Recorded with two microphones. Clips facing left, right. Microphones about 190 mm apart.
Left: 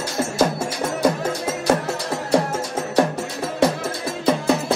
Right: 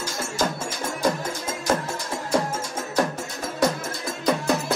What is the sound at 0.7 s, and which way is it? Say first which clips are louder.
Music: left 5 dB; 35° left (ahead or behind).